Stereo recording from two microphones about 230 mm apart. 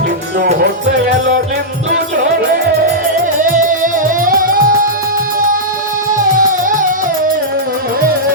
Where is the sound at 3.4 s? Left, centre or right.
Right.